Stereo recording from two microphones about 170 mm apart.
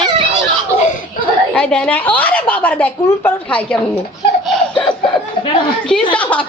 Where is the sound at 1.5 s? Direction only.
5° left (ahead or behind).